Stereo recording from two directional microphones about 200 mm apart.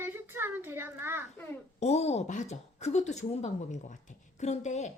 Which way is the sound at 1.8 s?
30° left (ahead or behind).